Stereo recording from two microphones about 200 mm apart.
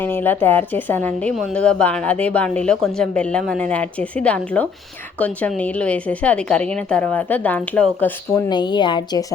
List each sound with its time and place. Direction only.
0.0 s speech: 10° left (ahead or behind)
8.4 s a woman's voice: 20° left (ahead or behind)